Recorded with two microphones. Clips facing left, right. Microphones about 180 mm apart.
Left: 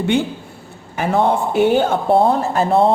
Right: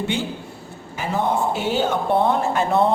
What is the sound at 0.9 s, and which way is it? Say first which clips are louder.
Speech: left 5 dB; 65° left (ahead or behind).